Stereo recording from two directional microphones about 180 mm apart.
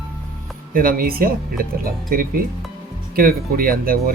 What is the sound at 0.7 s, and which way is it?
Speech, 55° right (ahead or behind).